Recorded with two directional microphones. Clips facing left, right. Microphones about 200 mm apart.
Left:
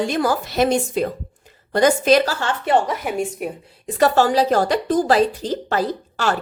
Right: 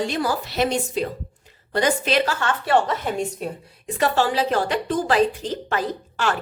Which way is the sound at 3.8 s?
40° left (ahead or behind).